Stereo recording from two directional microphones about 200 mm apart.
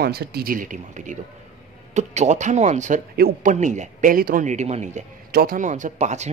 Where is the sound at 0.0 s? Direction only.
50° right (ahead or behind); by 3.0 s 35° right (ahead or behind).